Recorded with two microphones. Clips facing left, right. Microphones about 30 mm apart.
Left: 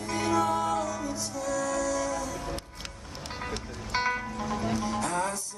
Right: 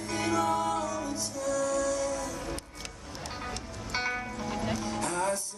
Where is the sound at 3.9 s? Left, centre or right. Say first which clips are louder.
Left 3 dB; centre.